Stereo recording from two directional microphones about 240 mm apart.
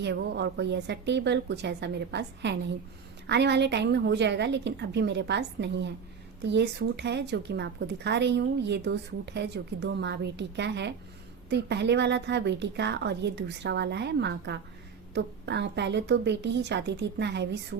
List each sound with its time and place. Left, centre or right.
0.0 s a woman's voice: right